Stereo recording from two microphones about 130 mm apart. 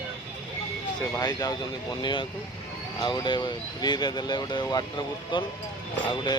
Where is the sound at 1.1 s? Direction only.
30° left (ahead or behind).